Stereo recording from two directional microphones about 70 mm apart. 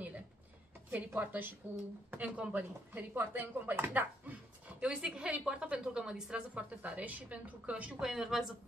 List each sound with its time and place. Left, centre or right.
0.9 s speech: right
4.7 s a woman's voice: centre
8.0 s speech: centre